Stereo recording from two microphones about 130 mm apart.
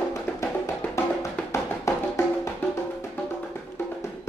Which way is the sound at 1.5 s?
20° left (ahead or behind).